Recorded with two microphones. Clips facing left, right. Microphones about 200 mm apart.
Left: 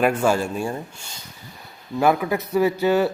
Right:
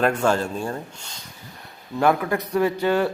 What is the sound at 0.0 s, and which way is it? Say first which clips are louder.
Speech: left 1 dB; 10° left (ahead or behind).